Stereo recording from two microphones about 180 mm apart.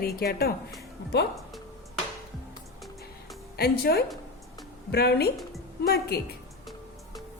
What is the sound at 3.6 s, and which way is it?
A woman's voice, 60° left (ahead or behind).